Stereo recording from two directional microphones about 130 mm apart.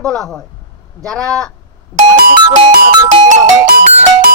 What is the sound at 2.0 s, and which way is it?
Music, 90° right.